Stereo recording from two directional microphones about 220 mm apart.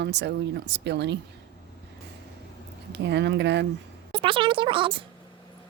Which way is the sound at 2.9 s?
50° right (ahead or behind).